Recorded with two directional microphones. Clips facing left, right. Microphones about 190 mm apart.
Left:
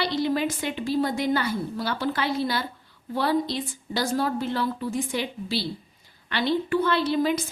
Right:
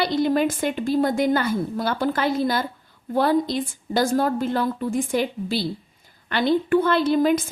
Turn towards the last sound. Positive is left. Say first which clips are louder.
# right 5 dB
turn(degrees=-50)  # may be behind; listen again after turning